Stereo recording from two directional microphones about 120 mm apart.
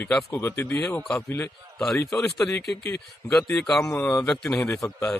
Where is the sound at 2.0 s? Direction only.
5° left (ahead or behind).